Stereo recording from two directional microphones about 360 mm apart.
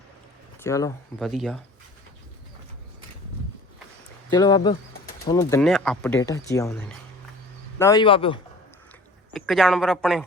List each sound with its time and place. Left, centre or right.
0.6 s speech: centre
4.3 s speech: centre
9.3 s speech: centre